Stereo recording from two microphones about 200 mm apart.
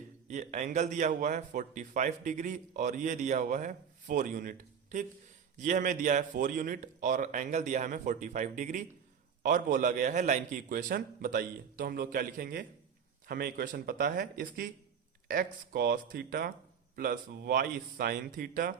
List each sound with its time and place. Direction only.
0.3 s speech: 35° right (ahead or behind)